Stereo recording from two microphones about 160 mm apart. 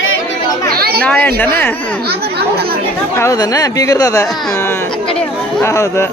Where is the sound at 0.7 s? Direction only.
75° right (ahead or behind).